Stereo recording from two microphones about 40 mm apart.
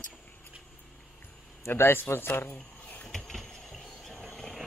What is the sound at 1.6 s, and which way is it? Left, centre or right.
Speech, left.